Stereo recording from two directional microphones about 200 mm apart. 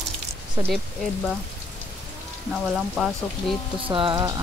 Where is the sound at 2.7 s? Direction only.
Centre (ahead or behind).